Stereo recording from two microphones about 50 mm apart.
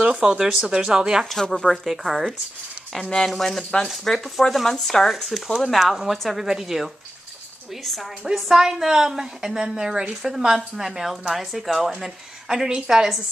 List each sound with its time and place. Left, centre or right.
0.2 s a woman's voice: centre
1.3 s speech: centre
1.7 s speech: centre
3.3 s speech: centre
8.4 s a woman's voice: centre